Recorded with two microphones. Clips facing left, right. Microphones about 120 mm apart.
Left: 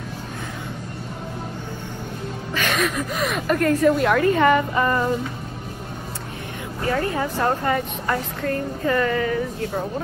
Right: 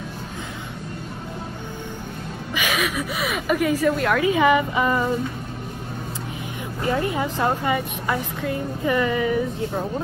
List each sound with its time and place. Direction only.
2.5 s a woman's voice: 10° right (ahead or behind)
6.8 s speech: 20° right (ahead or behind)